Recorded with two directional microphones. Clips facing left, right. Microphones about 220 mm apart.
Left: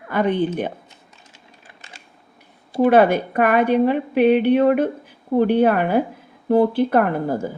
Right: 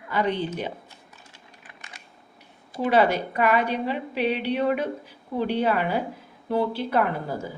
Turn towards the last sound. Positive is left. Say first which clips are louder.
# left 6 dB
turn(degrees=50)  # may be behind; listen again after turning